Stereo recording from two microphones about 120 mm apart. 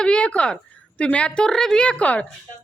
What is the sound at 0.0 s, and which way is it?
A woman's voice, 10° left (ahead or behind).